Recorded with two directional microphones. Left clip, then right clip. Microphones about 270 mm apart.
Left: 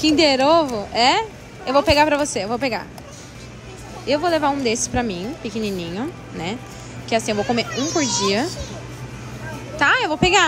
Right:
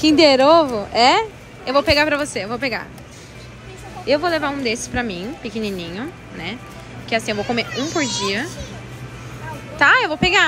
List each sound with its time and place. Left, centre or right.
0.0 s a woman's voice: centre
4.0 s a woman's voice: centre
9.8 s a woman's voice: centre